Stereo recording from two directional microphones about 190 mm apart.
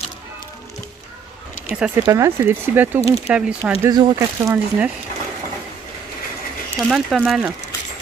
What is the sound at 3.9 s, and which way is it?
Speech, 20° right (ahead or behind).